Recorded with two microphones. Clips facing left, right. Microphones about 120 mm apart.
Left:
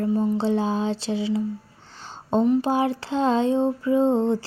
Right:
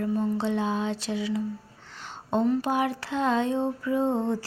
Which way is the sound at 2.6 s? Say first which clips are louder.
Left 4 dB; 30° left (ahead or behind).